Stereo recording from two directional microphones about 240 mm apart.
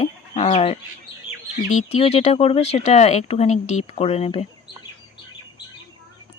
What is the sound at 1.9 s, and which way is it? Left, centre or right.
Speech, left.